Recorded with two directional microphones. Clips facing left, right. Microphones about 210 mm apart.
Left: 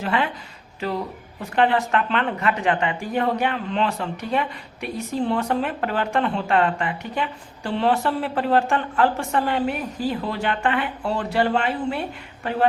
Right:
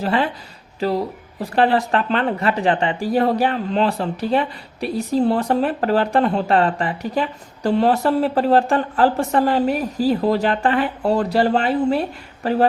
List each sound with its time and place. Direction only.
0.0 s speech: 35° right (ahead or behind)